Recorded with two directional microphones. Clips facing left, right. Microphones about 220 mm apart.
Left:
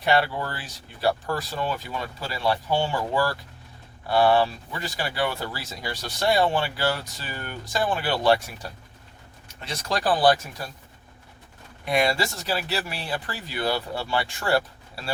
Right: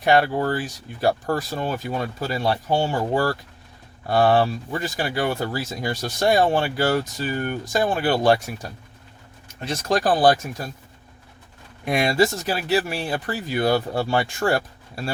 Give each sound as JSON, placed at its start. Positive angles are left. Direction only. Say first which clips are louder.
{"t": 0.0, "sound": "speech", "louder": "right 5 dB", "side_deg": -45}
{"t": 9.6, "sound": "speech", "louder": "right 6 dB", "side_deg": -50}
{"t": 11.9, "sound": "speech", "louder": "right 4 dB", "side_deg": -45}